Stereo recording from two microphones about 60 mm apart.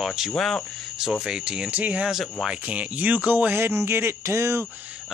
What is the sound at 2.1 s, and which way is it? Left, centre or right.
Speech, centre.